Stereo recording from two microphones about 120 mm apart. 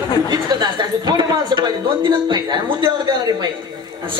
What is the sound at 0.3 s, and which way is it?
A man's voice, 40° right (ahead or behind).